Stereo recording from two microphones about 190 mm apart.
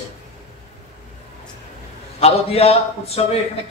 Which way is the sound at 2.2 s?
30° left (ahead or behind).